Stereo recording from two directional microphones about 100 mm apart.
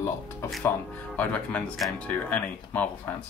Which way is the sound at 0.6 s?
15° left (ahead or behind).